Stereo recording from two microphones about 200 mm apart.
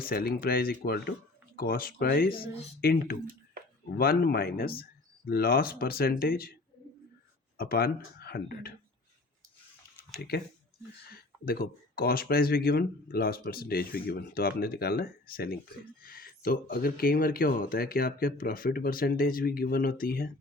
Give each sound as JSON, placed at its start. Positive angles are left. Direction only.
{"t": 0.0, "sound": "speech", "side_deg": 50}
{"t": 2.3, "sound": "speech", "side_deg": 25}
{"t": 2.8, "sound": "speech", "side_deg": 50}
{"t": 10.2, "sound": "speech", "side_deg": 50}
{"t": 11.4, "sound": "speech", "side_deg": 50}